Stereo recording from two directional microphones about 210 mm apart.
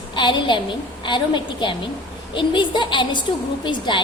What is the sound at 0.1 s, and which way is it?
A woman's voice, 20° left (ahead or behind).